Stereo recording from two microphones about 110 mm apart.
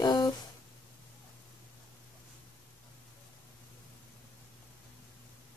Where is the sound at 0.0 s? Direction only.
40° left (ahead or behind).